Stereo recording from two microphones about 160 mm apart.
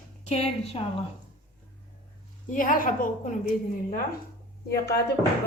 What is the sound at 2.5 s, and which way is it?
A woman's voice, 55° left (ahead or behind).